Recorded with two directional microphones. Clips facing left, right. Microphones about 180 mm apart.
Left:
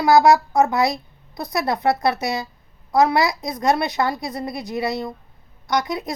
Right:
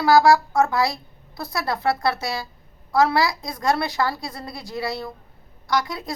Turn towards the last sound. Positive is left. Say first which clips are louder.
# left 2 dB
turn(degrees=20)  # may be behind; listen again after turning